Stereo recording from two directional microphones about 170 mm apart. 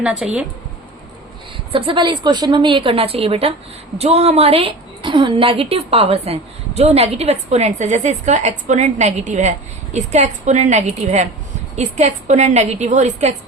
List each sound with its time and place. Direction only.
0.0 s speech: 5° right (ahead or behind)
1.7 s a woman's voice: 30° right (ahead or behind)